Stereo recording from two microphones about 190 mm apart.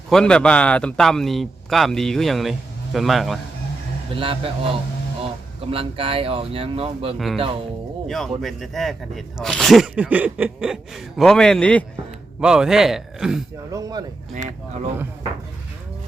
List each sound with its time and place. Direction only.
0.1 s speech: 5° left (ahead or behind)
4.1 s speech: 30° right (ahead or behind)
5.7 s speech: 30° right (ahead or behind)
8.0 s speech: centre (ahead or behind)
12.4 s speech: 5° right (ahead or behind)
13.7 s speech: 20° right (ahead or behind)